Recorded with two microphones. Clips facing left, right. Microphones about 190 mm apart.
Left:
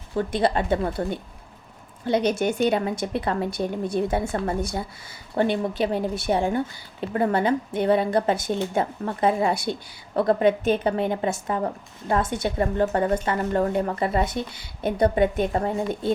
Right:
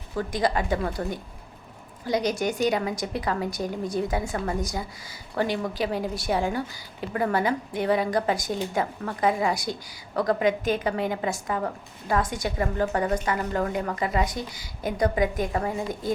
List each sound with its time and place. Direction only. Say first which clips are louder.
0.2 s a woman's voice: left 3 dB; 30° left (ahead or behind)